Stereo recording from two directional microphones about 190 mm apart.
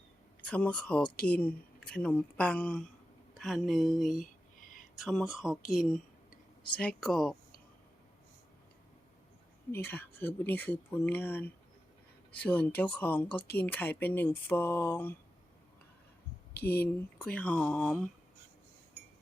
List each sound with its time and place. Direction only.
0.4 s speech: 5° left (ahead or behind)
4.2 s a sound: 45° left (ahead or behind)
4.9 s speech: centre (ahead or behind)
9.7 s speech: 10° left (ahead or behind)
16.6 s speech: 10° left (ahead or behind)